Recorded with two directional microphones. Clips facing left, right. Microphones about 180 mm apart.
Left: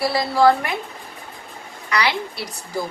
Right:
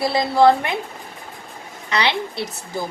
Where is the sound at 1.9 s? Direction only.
25° right (ahead or behind).